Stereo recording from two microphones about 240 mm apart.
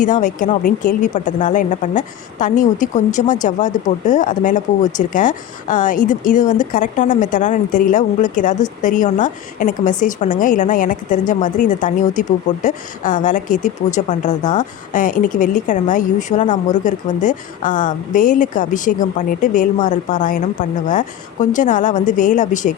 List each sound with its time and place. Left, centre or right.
0.0 s speech: left